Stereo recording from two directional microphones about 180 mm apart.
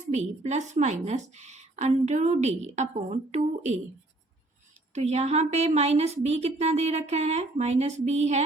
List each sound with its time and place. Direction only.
0.1 s a woman's voice: 40° right (ahead or behind)
4.9 s a woman's voice: 35° right (ahead or behind)